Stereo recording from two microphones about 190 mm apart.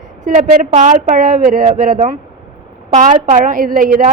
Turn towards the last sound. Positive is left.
turn(degrees=-45)  # may be behind; listen again after turning